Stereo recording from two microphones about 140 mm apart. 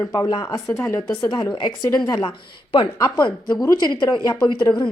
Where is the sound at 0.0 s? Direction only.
25° left (ahead or behind).